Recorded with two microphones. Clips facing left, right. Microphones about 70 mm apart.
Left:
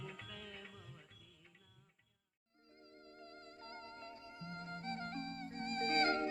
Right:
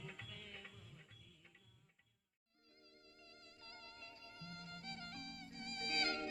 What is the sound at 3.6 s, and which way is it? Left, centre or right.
Music, left.